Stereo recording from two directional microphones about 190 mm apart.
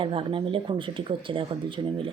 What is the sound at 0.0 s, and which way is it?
Speech, 30° right (ahead or behind).